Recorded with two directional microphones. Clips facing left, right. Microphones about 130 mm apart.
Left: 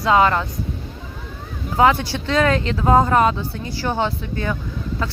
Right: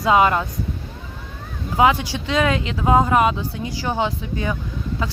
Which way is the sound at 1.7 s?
10° right (ahead or behind).